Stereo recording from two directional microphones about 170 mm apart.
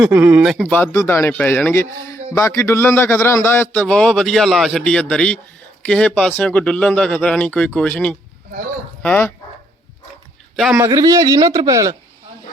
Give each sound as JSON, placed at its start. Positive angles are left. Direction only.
{"t": 0.0, "sound": "speech", "side_deg": -10}
{"t": 0.5, "sound": "a man's voice", "side_deg": 10}
{"t": 10.8, "sound": "speech", "side_deg": -20}